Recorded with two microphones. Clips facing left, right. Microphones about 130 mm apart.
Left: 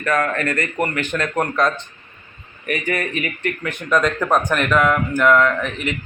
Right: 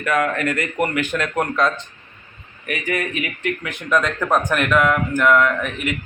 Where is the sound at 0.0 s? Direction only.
10° right (ahead or behind).